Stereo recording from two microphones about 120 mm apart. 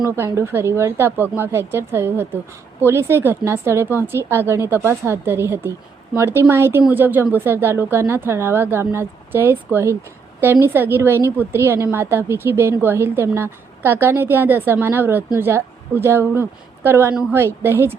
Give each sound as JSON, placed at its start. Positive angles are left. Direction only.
{"t": 0.2, "sound": "a woman's voice", "side_deg": -20}